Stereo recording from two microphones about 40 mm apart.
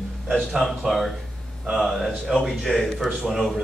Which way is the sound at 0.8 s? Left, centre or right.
Centre.